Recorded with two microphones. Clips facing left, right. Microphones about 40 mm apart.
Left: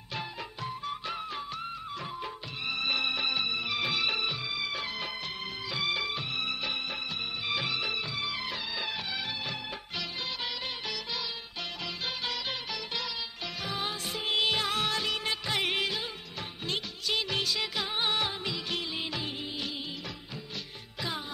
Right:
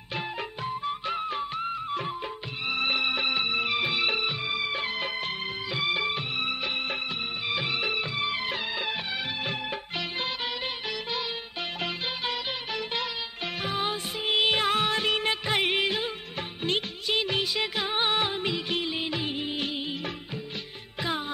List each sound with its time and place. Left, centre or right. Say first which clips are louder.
0.1 s music: right 5 dB; right
3.8 s music: right 3 dB; right
5.7 s music: right 3 dB; right
6.0 s music: right 4 dB; right
7.4 s music: right 2 dB; centre
7.7 s music: right 4 dB; right
11.8 s music: right 4 dB; right
13.6 s music of bollywood: right 5 dB; right
17.1 s music of bollywood: right 4 dB; right
18.7 s music of bollywood: right 5 dB; right